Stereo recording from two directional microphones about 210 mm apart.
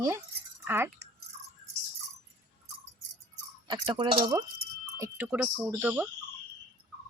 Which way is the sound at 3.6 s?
20° right (ahead or behind).